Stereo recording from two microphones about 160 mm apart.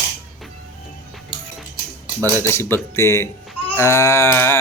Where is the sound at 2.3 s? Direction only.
15° left (ahead or behind).